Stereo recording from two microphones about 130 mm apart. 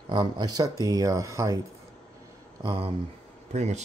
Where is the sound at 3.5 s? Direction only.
60° right (ahead or behind).